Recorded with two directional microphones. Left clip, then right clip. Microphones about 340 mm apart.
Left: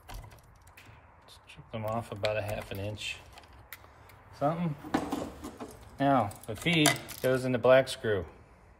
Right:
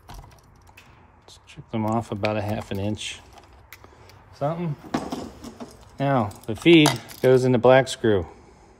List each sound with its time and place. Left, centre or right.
1.5 s speech: centre
4.4 s speech: right